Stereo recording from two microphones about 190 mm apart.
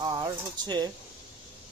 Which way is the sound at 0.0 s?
20° right (ahead or behind).